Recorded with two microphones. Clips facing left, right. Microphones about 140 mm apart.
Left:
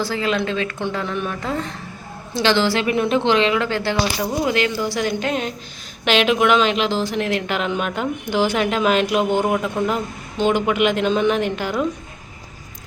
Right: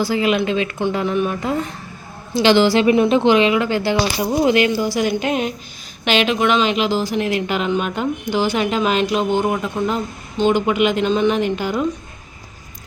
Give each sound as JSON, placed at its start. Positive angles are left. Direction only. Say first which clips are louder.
{"t": 0.0, "sound": "speech", "louder": "right 4 dB", "side_deg": -15}
{"t": 6.1, "sound": "speech", "louder": "left 1 dB", "side_deg": 0}